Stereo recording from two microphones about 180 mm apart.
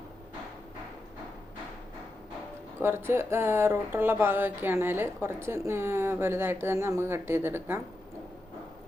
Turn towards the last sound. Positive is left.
turn(degrees=-15)  # may be behind; listen again after turning